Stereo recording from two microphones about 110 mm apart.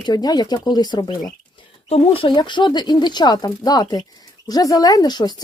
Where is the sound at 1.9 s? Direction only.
65° left (ahead or behind).